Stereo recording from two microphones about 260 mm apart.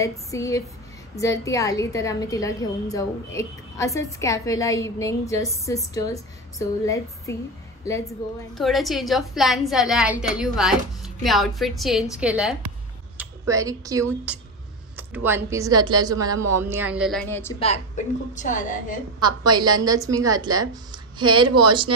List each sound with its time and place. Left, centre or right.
0.0 s a woman's voice: centre
8.5 s a woman's voice: centre
17.6 s a woman's voice: left
19.1 s speech: centre